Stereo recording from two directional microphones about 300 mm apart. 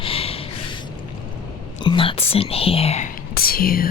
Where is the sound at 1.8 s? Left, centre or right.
Centre.